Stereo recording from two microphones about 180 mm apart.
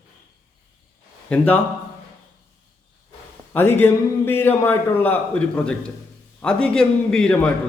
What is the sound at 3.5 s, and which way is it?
A man's voice, 10° left (ahead or behind).